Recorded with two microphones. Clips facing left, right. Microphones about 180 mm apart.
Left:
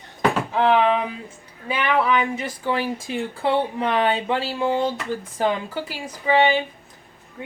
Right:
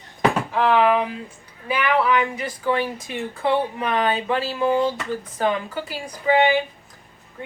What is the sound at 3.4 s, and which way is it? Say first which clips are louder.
Speech: even; 30° left (ahead or behind).